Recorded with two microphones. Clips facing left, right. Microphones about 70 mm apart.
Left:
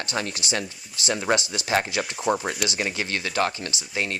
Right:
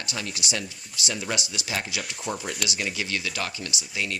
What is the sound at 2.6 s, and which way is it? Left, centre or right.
Speech, left.